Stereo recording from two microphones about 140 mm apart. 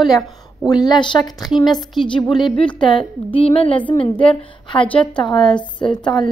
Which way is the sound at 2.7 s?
35° left (ahead or behind).